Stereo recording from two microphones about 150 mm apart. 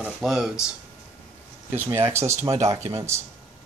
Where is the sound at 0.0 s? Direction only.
Centre (ahead or behind).